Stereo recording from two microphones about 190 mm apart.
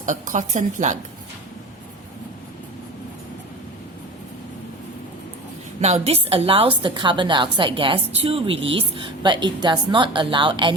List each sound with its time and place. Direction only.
0.0 s a woman's voice: 40° right (ahead or behind)
5.8 s a woman's voice: 35° right (ahead or behind)